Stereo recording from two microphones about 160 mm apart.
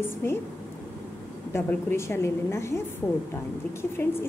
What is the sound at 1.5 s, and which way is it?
A woman's voice, 15° left (ahead or behind).